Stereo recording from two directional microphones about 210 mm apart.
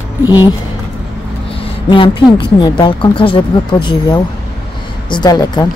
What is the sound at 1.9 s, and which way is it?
Speech, 25° left (ahead or behind).